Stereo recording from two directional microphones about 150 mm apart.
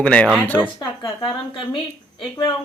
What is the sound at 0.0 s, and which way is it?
Speech, 10° left (ahead or behind).